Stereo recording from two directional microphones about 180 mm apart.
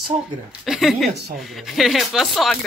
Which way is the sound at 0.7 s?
Centre (ahead or behind).